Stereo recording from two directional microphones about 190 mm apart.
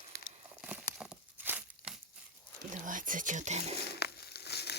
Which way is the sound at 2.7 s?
45° right (ahead or behind).